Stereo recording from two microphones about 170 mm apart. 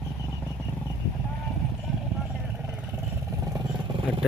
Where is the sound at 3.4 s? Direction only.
25° right (ahead or behind).